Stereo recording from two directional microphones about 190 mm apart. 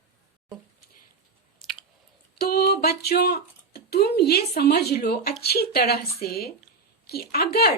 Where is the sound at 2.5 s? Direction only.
55° left (ahead or behind).